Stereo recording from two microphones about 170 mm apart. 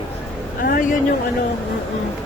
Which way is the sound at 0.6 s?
55° left (ahead or behind).